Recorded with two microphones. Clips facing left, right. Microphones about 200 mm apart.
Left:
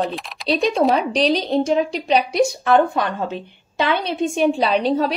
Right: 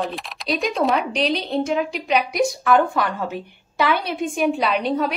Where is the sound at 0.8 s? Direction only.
35° left (ahead or behind).